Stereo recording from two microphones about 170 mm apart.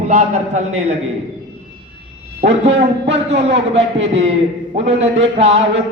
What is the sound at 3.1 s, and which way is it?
A man's voice, 40° right (ahead or behind).